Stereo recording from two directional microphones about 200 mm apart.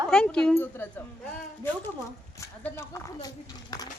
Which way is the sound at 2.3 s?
15° left (ahead or behind).